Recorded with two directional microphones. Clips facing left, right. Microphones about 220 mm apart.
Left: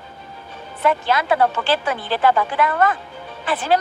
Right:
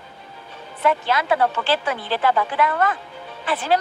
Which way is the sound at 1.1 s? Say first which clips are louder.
Left 2 dB; 45° left (ahead or behind).